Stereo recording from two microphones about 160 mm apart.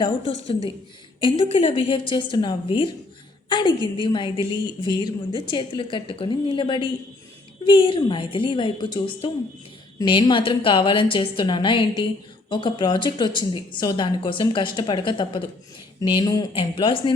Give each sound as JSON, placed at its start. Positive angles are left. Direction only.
{"t": 0.0, "sound": "a woman's voice", "side_deg": 35}
{"t": 1.5, "sound": "a woman's voice", "side_deg": 35}